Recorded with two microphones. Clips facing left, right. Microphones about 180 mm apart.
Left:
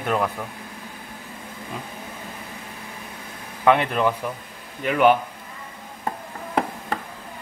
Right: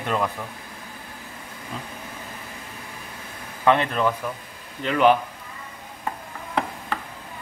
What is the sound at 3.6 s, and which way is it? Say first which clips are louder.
Speech: left 1 dB; 10° left (ahead or behind).